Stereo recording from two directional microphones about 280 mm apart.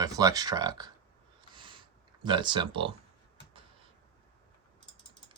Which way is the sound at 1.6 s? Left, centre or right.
Centre.